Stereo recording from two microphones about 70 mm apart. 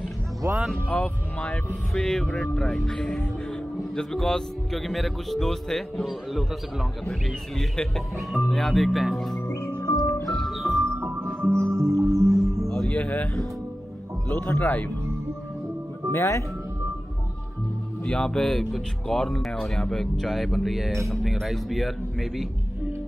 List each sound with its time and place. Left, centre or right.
0.8 s speech: centre
10.2 s music: centre
10.8 s music: right
12.6 s music: centre
13.2 s speech: centre
14.3 s speech: left
16.1 s speech: left
18.0 s speech: centre